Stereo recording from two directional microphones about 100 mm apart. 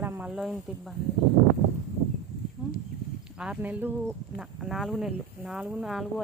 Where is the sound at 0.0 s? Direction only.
20° right (ahead or behind).